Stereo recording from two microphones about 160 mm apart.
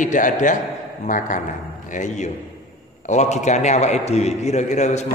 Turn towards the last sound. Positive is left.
turn(degrees=45)  # may be behind; listen again after turning